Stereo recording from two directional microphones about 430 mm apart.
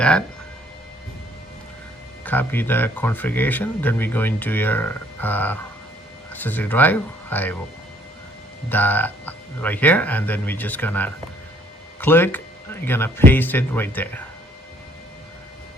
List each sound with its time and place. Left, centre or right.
0.0 s speech: centre
2.2 s speech: centre
8.7 s speech: centre